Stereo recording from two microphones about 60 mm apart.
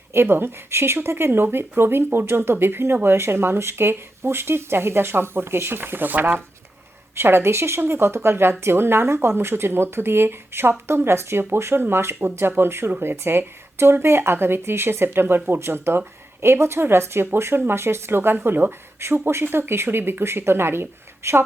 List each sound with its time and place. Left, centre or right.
0.1 s a woman's voice: right